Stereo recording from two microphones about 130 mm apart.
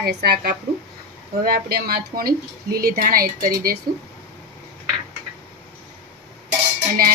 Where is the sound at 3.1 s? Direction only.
90° right.